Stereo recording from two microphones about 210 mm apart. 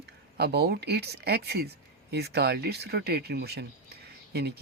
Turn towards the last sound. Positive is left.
turn(degrees=-50)  # may be behind; listen again after turning